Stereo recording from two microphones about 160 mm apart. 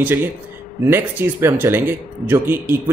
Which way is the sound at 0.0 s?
15° right (ahead or behind).